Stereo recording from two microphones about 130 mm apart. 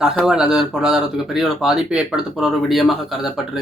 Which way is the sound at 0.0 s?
5° right (ahead or behind).